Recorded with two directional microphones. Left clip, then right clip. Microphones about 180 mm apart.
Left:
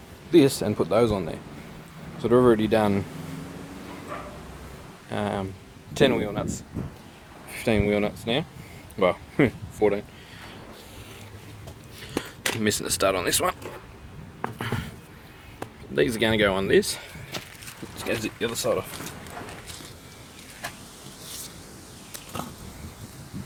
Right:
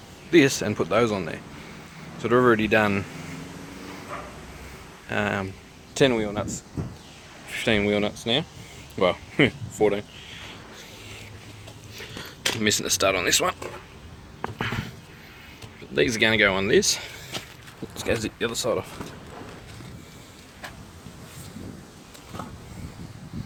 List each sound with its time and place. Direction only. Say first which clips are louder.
0.3 s speech: even; 10° left (ahead or behind)
5.0 s speech: right 3 dB; 15° left (ahead or behind)
7.5 s speech: right 1 dB; 10° left (ahead or behind)
11.9 s a sound: left 5 dB; 25° left (ahead or behind)
12.6 s speech: right 2 dB; 35° left (ahead or behind)
14.6 s a sound: right 4 dB; 30° left (ahead or behind)
16.0 s speech: right 2 dB; 20° left (ahead or behind)
17.0 s walk: right 2 dB; 5° left (ahead or behind)
18.0 s speech: right 2 dB; 15° right (ahead or behind)